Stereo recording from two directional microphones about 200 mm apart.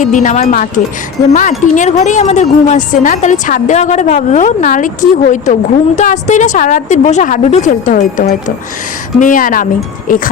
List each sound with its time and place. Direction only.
0.0 s a woman's voice: 40° left (ahead or behind)